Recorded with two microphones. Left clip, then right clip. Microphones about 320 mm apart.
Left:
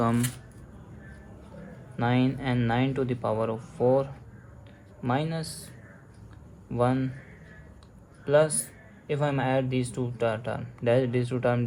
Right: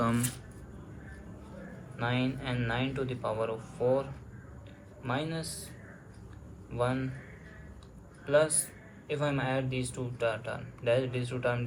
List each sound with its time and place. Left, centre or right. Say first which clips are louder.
0.0 s a sound: left 4 dB; left
2.0 s speech: left 6 dB; left
6.7 s speech: left 5 dB; left
8.2 s speech: left 4 dB; left